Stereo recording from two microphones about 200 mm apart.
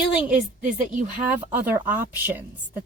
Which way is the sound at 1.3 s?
10° right (ahead or behind).